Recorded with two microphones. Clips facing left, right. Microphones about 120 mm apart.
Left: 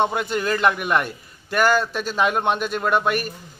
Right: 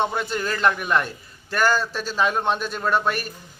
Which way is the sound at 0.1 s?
10° left (ahead or behind).